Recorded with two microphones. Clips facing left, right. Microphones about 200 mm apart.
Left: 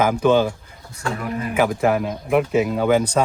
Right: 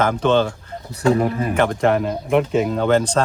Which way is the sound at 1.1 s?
30° right (ahead or behind).